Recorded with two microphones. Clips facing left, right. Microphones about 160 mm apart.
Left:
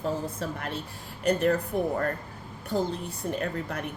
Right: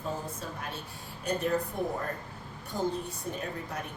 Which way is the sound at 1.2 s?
65° left (ahead or behind).